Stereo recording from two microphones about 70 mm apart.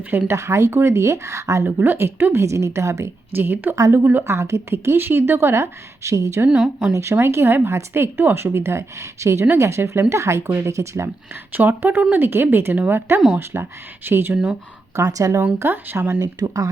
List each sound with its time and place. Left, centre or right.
0.3 s speech: right
1.6 s speech: right
3.3 s speech: right
3.8 s speech: right
4.0 s speech: right
6.5 s speech: centre
6.9 s speech: right
11.5 s speech: right
12.7 s speech: right
13.5 s speech: right
14.9 s speech: right
15.5 s speech: right
16.2 s speech: right